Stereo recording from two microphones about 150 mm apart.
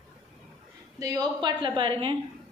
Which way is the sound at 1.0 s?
25° right (ahead or behind).